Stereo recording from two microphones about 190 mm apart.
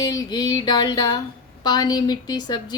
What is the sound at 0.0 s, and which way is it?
A woman's voice, 20° left (ahead or behind).